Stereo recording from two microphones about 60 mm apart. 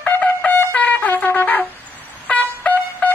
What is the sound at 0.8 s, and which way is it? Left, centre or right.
Shofar, left.